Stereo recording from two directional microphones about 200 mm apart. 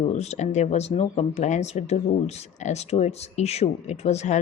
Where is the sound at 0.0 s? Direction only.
35° left (ahead or behind).